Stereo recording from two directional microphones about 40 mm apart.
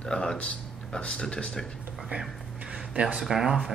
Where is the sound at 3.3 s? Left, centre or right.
Centre.